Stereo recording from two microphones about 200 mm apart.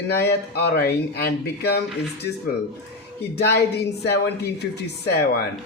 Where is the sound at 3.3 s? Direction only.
55° left (ahead or behind).